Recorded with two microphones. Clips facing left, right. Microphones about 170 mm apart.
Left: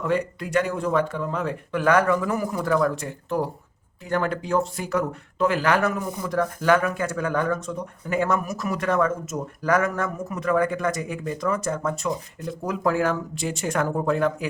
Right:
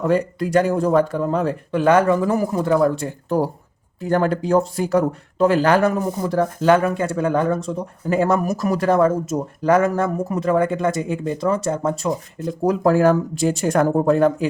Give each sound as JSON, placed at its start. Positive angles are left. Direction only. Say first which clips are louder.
{"t": 0.0, "sound": "speech", "louder": "right 6 dB", "side_deg": -35}